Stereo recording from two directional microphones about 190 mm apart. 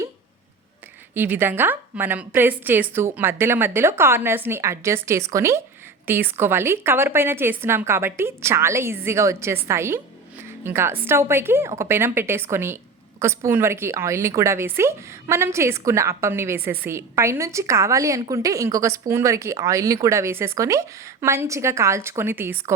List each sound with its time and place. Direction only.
1.1 s a woman's voice: 10° right (ahead or behind)